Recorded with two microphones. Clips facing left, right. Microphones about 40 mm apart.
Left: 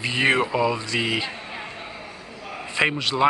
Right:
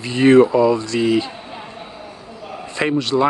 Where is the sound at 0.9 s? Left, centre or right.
Centre.